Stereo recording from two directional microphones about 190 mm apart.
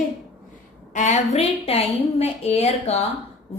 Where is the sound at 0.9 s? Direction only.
40° left (ahead or behind).